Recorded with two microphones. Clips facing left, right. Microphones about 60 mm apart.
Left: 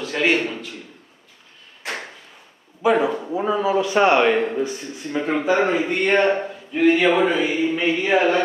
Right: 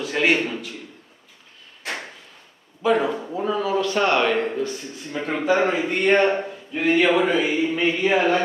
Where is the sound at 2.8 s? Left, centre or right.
Centre.